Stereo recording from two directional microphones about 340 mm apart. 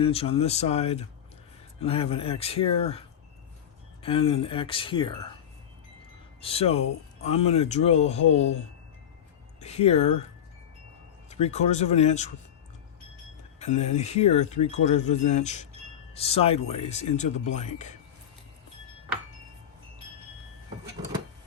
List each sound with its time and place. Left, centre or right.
0.0 s speech: centre
4.0 s speech: centre
6.4 s speech: centre
9.6 s speech: centre
11.3 s speech: centre
13.6 s speech: centre